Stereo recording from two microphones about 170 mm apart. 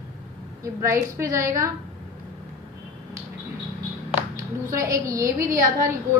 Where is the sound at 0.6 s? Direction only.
15° right (ahead or behind).